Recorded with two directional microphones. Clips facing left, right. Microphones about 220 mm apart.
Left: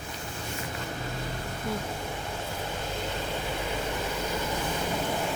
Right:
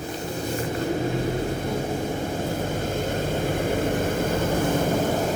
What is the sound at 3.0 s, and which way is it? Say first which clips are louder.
Vehicle: right 8 dB; 50° right (ahead or behind).